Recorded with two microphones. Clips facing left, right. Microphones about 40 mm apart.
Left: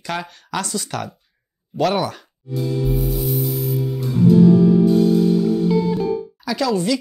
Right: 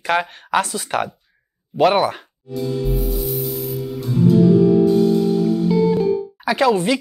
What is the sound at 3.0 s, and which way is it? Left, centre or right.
Music, centre.